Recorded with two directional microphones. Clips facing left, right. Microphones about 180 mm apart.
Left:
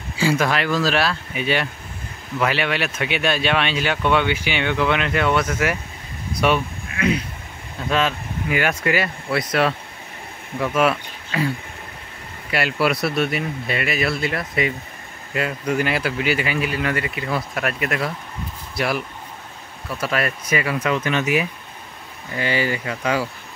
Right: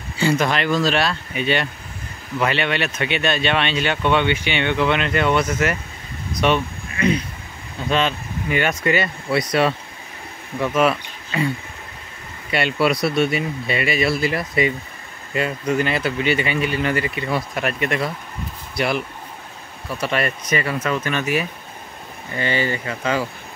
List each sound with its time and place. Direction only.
0.2 s speech: 5° left (ahead or behind)